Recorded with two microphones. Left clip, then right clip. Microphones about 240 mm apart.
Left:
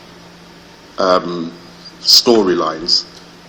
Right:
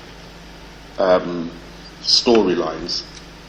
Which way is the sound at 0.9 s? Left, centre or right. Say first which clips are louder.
Left 2 dB; left.